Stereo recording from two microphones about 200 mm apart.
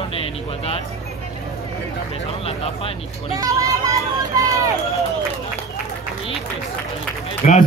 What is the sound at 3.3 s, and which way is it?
Vehicle, 15° right (ahead or behind).